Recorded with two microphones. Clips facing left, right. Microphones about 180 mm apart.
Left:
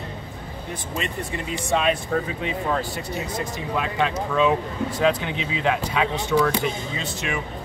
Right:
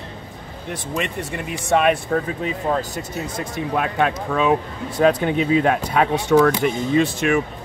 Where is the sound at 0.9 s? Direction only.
65° right (ahead or behind).